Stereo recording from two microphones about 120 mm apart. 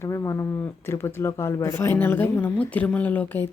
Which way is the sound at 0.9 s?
20° left (ahead or behind).